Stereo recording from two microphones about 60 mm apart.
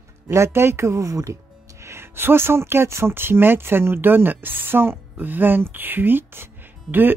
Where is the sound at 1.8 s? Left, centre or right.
Right.